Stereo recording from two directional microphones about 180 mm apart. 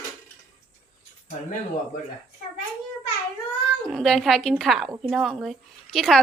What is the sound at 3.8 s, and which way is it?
A woman's voice, centre (ahead or behind).